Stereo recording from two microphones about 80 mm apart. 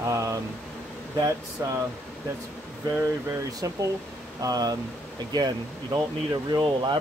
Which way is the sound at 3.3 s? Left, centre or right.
Right.